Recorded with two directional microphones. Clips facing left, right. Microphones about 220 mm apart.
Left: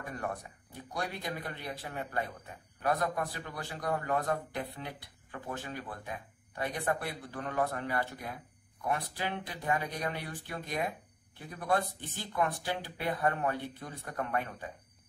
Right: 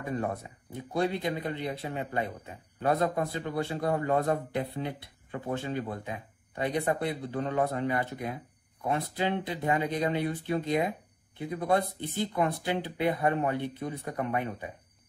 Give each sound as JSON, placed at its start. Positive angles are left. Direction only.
{"t": 0.0, "sound": "speech", "side_deg": -25}